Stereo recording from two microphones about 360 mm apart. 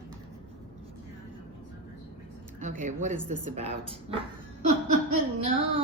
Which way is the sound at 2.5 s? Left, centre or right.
Centre.